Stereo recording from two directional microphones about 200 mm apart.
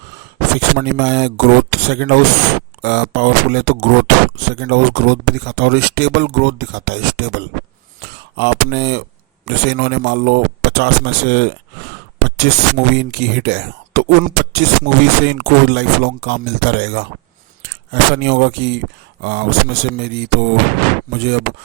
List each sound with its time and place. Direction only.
0.8 s speech: 60° right (ahead or behind)